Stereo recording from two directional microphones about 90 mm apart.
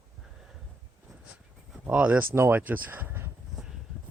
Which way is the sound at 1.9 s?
15° right (ahead or behind).